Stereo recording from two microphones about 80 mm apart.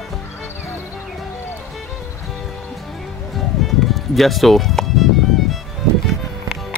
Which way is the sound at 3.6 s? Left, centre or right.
Centre.